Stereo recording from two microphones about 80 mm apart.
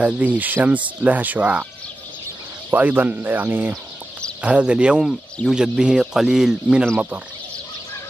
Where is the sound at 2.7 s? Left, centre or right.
Right.